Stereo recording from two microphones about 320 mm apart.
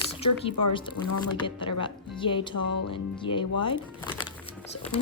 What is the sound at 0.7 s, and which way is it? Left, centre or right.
Speech, centre.